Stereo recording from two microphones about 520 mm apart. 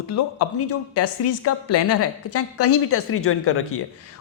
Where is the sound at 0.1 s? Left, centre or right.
Left.